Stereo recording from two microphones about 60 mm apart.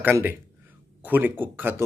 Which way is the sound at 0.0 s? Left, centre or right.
Right.